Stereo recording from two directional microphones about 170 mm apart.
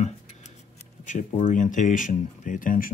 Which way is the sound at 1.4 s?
50° left (ahead or behind).